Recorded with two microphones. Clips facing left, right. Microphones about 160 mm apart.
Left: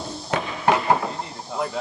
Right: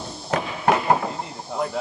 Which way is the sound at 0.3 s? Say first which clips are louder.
Even; 5° right (ahead or behind).